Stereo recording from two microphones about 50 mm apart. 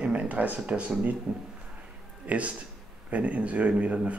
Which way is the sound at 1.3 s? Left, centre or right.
Centre.